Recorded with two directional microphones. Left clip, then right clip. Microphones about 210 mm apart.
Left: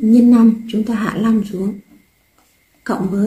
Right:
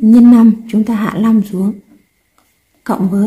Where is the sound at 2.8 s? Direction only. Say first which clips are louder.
Right 4 dB; 40° right (ahead or behind).